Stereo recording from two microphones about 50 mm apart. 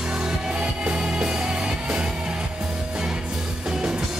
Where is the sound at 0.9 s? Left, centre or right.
Centre.